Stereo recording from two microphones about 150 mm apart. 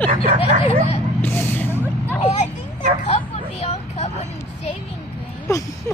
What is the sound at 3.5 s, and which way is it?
Vehicle, 45° left (ahead or behind).